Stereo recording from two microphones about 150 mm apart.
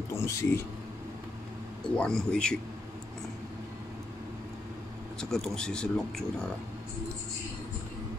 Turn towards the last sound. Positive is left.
turn(degrees=5)  # may be behind; listen again after turning